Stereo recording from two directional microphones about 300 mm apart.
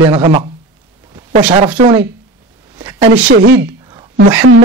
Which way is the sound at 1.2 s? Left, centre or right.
Right.